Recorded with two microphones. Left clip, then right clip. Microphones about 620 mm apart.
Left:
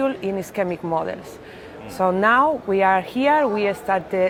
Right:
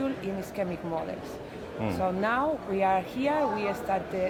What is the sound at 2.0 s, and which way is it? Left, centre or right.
Speech, left.